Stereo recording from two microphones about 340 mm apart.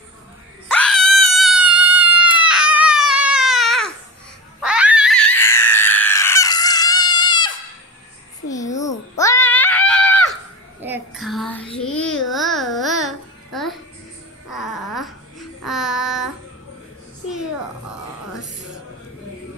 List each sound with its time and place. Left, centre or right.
0.7 s wail: centre
1.8 s a sound: centre
8.7 s screaming: centre
10.8 s child singing: centre
11.8 s babbling: centre
12.3 s music: centre
14.5 s babbling: centre
15.6 s child singing: centre
18.3 s music: left